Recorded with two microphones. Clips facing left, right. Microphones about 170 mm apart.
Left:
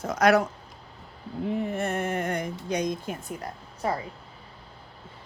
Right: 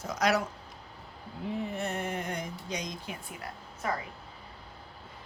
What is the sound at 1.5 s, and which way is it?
Speech, 50° left (ahead or behind).